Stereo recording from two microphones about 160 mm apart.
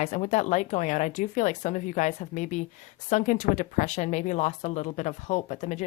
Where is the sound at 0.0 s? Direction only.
45° left (ahead or behind).